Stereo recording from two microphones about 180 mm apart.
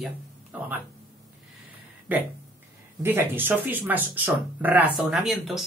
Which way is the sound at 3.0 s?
10° right (ahead or behind).